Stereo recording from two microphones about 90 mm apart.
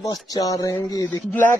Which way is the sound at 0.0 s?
40° left (ahead or behind).